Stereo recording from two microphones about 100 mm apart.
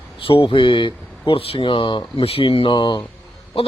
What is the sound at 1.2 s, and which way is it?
A man's voice, 65° left (ahead or behind).